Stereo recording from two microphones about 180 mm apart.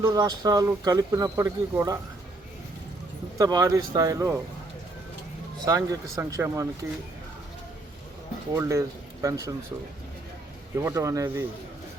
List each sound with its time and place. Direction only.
0.0 s speech: 20° right (ahead or behind)
3.3 s speech: 20° right (ahead or behind)
5.6 s speech: 20° right (ahead or behind)
8.5 s speech: 15° right (ahead or behind)
10.8 s speech: 15° right (ahead or behind)